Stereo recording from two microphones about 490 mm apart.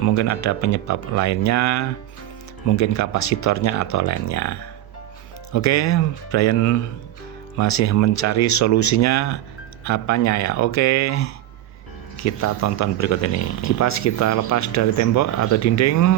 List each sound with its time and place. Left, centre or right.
0.0 s speech: left